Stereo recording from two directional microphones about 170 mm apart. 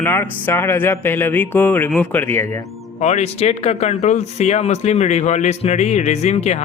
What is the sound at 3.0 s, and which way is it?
Speech, 40° left (ahead or behind).